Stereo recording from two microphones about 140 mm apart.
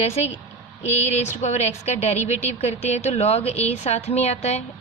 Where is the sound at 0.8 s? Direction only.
55° left (ahead or behind).